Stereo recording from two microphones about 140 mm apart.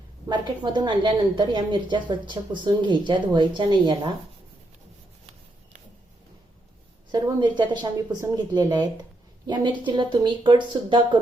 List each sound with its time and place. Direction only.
0.3 s a woman's voice: 30° right (ahead or behind)
7.1 s a woman's voice: 30° right (ahead or behind)